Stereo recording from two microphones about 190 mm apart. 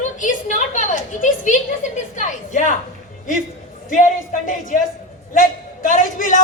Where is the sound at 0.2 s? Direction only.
40° left (ahead or behind).